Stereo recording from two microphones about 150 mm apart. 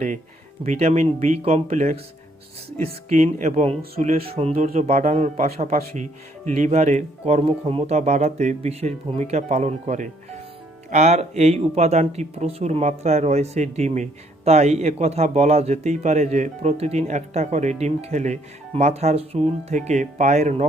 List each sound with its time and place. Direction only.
0.6 s speech: 50° right (ahead or behind)
3.3 s speech: 50° right (ahead or behind)